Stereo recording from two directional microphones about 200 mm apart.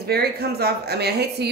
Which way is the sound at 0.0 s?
50° right (ahead or behind).